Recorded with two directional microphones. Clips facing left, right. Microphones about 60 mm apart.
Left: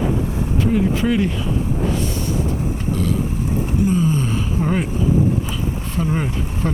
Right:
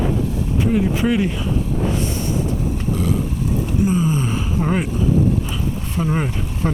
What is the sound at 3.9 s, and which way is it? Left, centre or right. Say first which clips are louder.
Gasp: left 2 dB; centre.